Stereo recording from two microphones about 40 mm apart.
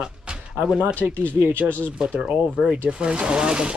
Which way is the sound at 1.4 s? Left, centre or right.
Right.